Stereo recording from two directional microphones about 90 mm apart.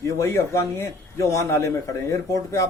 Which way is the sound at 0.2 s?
35° left (ahead or behind).